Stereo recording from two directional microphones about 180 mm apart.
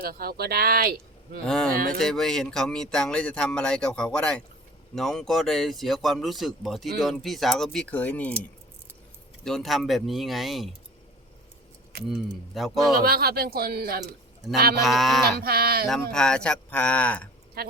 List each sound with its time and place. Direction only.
0.0 s speech: 55° right (ahead or behind)
1.5 s speech: 5° left (ahead or behind)
1.7 s speech: 55° right (ahead or behind)
2.0 s speech: centre (ahead or behind)
9.4 s speech: centre (ahead or behind)
12.0 s speech: centre (ahead or behind)
13.0 s speech: 60° right (ahead or behind)
14.8 s speech: centre (ahead or behind)
15.4 s speech: 60° right (ahead or behind)
16.1 s speech: 5° left (ahead or behind)
17.6 s a woman's voice: 60° right (ahead or behind)